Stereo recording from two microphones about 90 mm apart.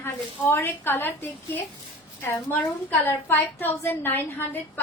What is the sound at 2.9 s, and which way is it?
A woman's voice, 25° left (ahead or behind).